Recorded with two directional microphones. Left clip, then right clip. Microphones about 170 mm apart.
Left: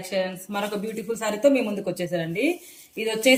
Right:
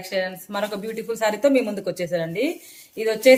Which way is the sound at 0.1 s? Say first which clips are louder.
Right 1 dB; 30° right (ahead or behind).